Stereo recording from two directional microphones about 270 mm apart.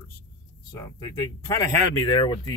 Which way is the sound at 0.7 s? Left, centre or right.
Centre.